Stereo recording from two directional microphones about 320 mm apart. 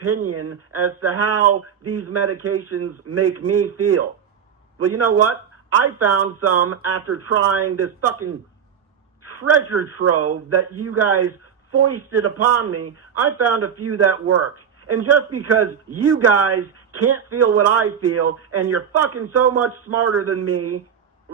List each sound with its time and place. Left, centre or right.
0.3 s a man's voice: right